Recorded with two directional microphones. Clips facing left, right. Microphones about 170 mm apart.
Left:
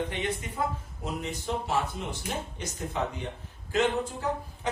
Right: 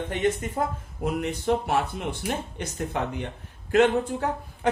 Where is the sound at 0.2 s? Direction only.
45° right (ahead or behind).